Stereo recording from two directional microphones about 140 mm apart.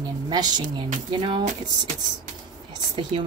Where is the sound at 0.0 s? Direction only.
30° right (ahead or behind).